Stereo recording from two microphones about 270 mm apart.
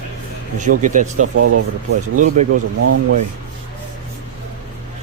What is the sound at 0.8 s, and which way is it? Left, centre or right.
Speech, right.